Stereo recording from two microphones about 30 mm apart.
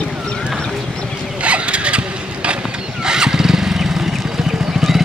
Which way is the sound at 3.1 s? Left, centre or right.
Right.